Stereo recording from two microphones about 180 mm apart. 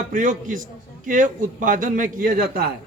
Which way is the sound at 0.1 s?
45° right (ahead or behind).